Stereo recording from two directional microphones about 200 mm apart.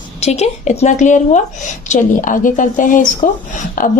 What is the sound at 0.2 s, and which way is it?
A woman's voice, 35° left (ahead or behind).